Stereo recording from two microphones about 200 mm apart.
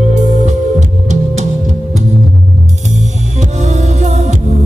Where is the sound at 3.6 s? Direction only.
35° right (ahead or behind).